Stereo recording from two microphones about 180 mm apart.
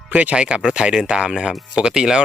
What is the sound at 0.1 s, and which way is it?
Speech, 5° right (ahead or behind).